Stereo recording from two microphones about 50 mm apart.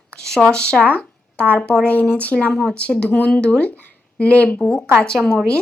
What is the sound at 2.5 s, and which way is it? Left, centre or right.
Speech, centre.